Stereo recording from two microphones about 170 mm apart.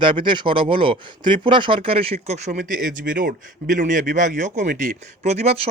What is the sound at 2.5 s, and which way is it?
Speech, 55° right (ahead or behind).